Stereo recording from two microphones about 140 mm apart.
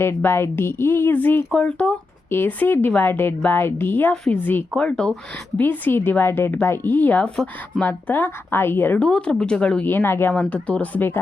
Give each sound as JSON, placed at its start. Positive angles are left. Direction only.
{"t": 0.0, "sound": "a woman's voice", "side_deg": 15}